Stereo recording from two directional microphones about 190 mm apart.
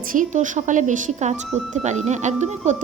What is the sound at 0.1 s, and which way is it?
A woman's voice, 40° right (ahead or behind).